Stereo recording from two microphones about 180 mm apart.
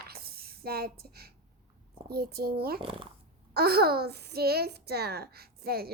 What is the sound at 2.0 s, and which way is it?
Speech, 60° right (ahead or behind).